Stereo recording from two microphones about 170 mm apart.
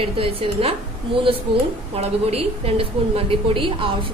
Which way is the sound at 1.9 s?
35° right (ahead or behind).